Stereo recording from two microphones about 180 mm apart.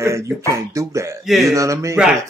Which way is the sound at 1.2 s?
Centre (ahead or behind).